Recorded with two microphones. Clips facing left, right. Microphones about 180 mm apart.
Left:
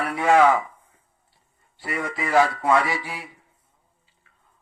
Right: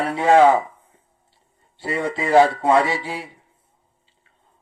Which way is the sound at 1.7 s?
30° right (ahead or behind).